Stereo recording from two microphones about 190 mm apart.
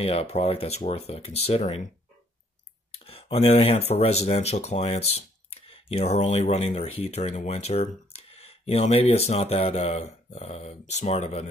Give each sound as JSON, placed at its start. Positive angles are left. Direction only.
{"t": 0.0, "sound": "speech", "side_deg": 30}
{"t": 2.9, "sound": "speech", "side_deg": 30}